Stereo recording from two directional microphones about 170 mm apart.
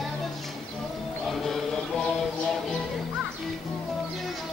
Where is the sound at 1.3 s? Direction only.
Centre (ahead or behind).